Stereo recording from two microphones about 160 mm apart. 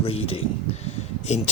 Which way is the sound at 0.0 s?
35° left (ahead or behind).